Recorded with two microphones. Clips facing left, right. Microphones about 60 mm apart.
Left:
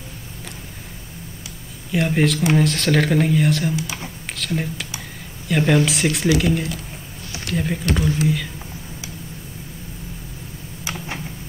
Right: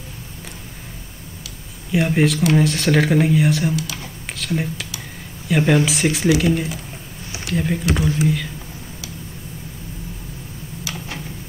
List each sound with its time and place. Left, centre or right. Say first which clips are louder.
1.9 s speech: right 1 dB; centre
3.7 s speech: right 1 dB; left
4.4 s speech: right 1 dB; centre
10.8 s a sound: left 2 dB; left